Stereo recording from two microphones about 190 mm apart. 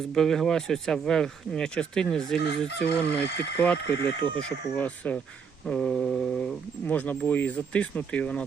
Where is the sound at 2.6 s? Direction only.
60° left (ahead or behind).